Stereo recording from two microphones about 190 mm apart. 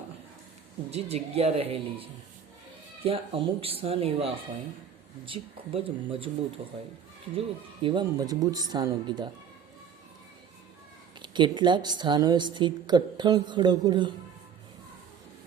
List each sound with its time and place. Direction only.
0.9 s a woman's voice: 35° right (ahead or behind)
7.3 s a woman's voice: 30° right (ahead or behind)
11.2 s a woman's voice: 25° right (ahead or behind)